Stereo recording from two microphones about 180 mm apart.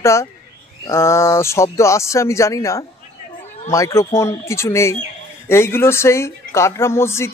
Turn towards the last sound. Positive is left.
turn(degrees=15)  # may be behind; listen again after turning